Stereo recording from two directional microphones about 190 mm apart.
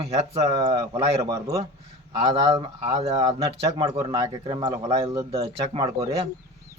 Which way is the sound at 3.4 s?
20° right (ahead or behind).